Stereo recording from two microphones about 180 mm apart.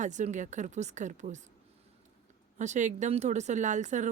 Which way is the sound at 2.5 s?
40° right (ahead or behind).